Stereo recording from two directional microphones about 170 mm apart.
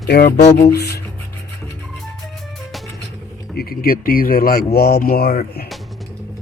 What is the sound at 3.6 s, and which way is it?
Speech, 60° left (ahead or behind).